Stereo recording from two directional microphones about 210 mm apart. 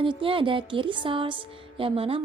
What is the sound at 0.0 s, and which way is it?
A woman's voice, 25° right (ahead or behind).